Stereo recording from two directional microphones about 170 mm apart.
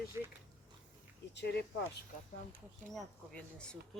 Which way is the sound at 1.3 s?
90° left.